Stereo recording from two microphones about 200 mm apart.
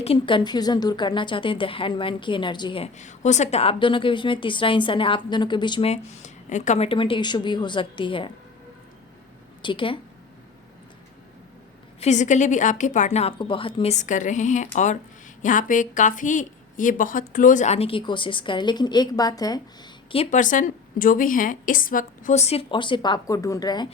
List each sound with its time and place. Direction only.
0.0 s a woman's voice: 25° left (ahead or behind)
9.6 s a woman's voice: 25° left (ahead or behind)
11.9 s a woman's voice: 35° left (ahead or behind)
20.3 s a woman's voice: 40° left (ahead or behind); by 23.9 s 20° left (ahead or behind)